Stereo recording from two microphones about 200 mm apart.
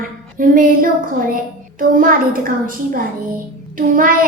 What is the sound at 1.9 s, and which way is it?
Speech, 45° right (ahead or behind).